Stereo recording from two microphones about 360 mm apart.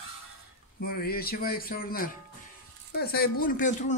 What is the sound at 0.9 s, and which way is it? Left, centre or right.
Speech, left.